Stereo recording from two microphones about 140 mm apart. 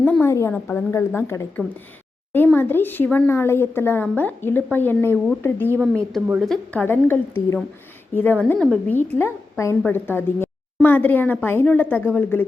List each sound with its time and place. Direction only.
0.0 s speech: 15° left (ahead or behind)
6.4 s a woman's voice: centre (ahead or behind)
6.8 s a woman's voice: 15° left (ahead or behind)
9.0 s speech: 15° left (ahead or behind)